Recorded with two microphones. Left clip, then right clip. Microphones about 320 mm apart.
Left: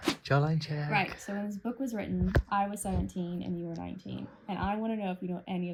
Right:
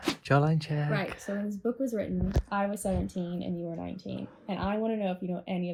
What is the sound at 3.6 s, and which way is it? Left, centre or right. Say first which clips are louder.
Speech: right 3 dB; centre.